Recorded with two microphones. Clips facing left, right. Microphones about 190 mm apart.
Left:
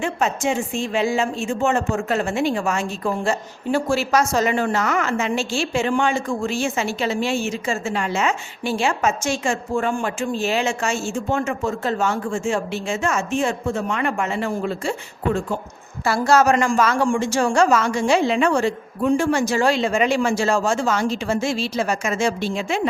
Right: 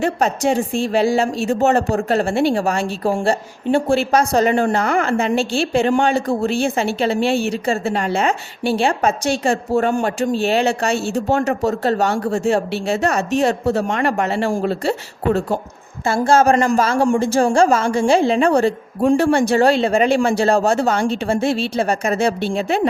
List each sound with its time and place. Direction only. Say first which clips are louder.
0.0 s a woman's voice: right 4 dB; 35° right (ahead or behind)
14.3 s speech: right 5 dB; 80° right
14.7 s a woman's voice: right 5 dB; 35° right (ahead or behind)
19.1 s speech: right 4 dB; 60° right (ahead or behind)
19.5 s a woman's voice: right 5 dB; 35° right (ahead or behind)
21.4 s speech: right 4 dB; 60° right (ahead or behind)
21.8 s a woman's voice: right 2 dB; 35° right (ahead or behind)